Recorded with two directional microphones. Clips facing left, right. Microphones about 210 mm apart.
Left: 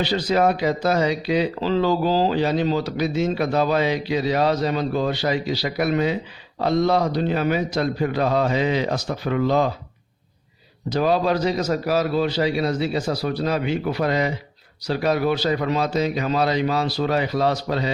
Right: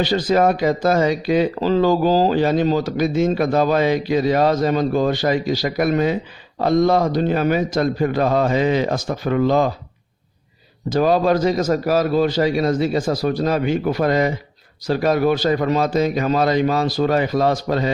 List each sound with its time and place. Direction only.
0.0 s speech: 45° right (ahead or behind)
10.8 s speech: 45° right (ahead or behind)